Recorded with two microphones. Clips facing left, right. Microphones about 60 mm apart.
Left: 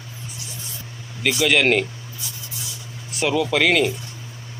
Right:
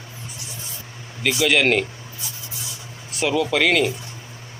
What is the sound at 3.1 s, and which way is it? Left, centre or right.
Speech, centre.